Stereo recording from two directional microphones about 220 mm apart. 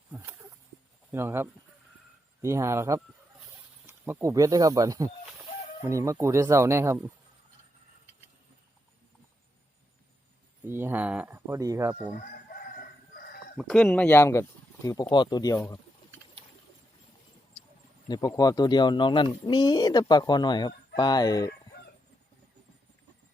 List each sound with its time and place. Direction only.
0.1 s speech: 10° right (ahead or behind)
10.7 s speech: 10° right (ahead or behind)
13.1 s chicken: 45° left (ahead or behind)
13.6 s speech: 5° left (ahead or behind)
18.1 s speech: 15° left (ahead or behind)